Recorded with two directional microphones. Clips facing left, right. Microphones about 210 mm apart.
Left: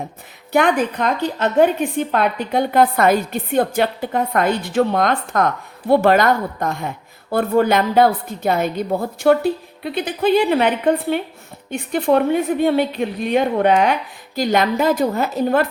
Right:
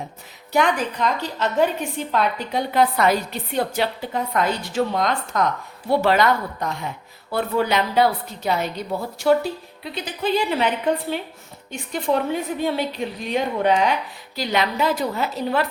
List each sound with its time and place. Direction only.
0.5 s a woman's voice: 55° left (ahead or behind)
11.7 s a woman's voice: 55° left (ahead or behind)